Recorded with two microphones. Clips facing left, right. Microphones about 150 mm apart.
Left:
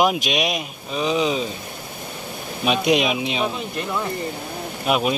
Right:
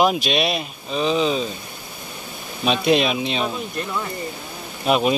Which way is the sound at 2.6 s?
15° left (ahead or behind).